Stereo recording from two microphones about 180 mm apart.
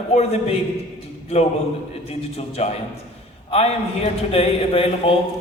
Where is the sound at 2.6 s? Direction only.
35° left (ahead or behind).